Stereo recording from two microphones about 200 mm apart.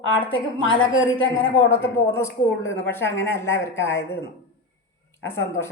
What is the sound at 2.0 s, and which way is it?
A woman's voice, 10° left (ahead or behind).